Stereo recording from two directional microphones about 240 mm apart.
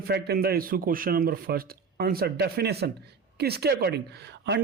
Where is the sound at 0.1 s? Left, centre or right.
Right.